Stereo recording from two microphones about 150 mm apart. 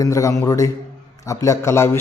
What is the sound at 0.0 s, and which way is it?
A man's voice, 20° left (ahead or behind).